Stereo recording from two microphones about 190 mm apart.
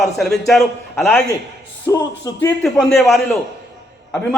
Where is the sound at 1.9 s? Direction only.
15° left (ahead or behind).